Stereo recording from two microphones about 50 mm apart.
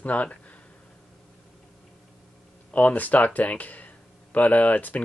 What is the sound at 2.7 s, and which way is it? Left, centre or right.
Speech, left.